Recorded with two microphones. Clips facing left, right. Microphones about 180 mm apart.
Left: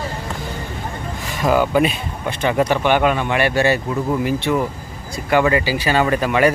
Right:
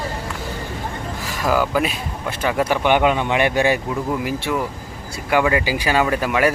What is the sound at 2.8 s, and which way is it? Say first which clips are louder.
Speech: even; 15° right (ahead or behind).